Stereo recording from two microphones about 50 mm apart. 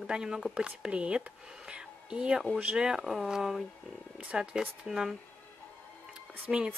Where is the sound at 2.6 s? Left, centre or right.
Centre.